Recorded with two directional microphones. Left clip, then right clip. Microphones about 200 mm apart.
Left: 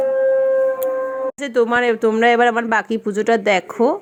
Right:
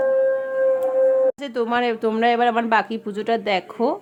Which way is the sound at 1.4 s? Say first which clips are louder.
Left 5 dB; 15° left (ahead or behind).